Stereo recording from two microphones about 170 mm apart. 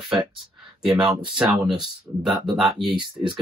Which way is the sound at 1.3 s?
5° right (ahead or behind).